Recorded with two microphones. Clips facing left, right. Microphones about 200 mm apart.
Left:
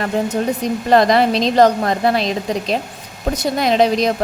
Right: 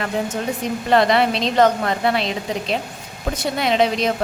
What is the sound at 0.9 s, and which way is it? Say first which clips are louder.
A woman's voice: left 3 dB; 40° left (ahead or behind).